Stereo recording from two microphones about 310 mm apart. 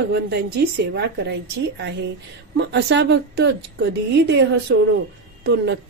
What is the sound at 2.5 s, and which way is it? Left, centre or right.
A woman's voice, right.